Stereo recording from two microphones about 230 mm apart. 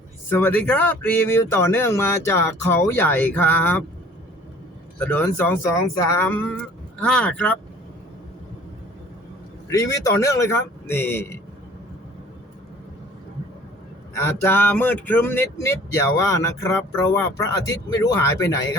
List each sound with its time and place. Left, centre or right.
0.3 s speech: centre
4.9 s speech: centre
9.6 s speech: centre
14.1 s speech: centre